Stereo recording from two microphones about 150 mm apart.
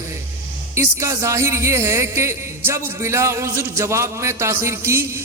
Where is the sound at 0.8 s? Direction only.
20° right (ahead or behind).